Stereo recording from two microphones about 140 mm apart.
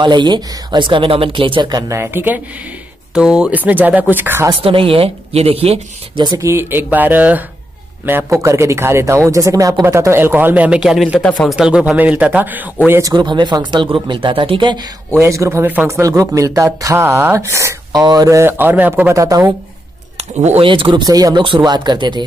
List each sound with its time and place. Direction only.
0.0 s speech: 35° right (ahead or behind); by 4.5 s 15° right (ahead or behind)
4.5 s speech: 40° right (ahead or behind)
6.2 s speech: 25° right (ahead or behind); by 11.5 s 10° left (ahead or behind)
11.5 s speech: 5° right (ahead or behind)
13.1 s speech: 35° right (ahead or behind)
15.1 s speech: 20° right (ahead or behind)
16.0 s speech: 25° right (ahead or behind)
20.2 s speech: 50° right (ahead or behind)
20.6 s speech: 35° right (ahead or behind)